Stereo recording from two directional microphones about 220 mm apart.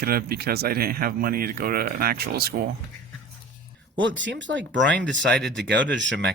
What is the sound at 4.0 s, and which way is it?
Speech, 55° right (ahead or behind).